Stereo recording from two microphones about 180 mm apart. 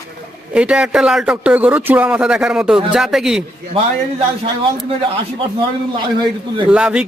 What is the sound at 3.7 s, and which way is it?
Speech, 30° right (ahead or behind).